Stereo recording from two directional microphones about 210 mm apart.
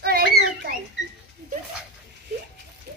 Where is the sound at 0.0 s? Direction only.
50° right (ahead or behind).